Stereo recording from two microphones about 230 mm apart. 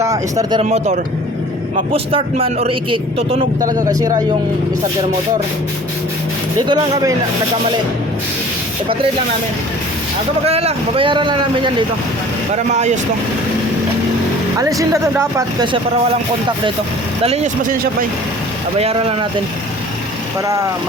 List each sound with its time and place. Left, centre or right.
0.0 s speech: centre
0.6 s speech: right
6.6 s speech: centre
10.4 s speech: right
14.6 s speech: centre
17.2 s speech: right
18.8 s speech: right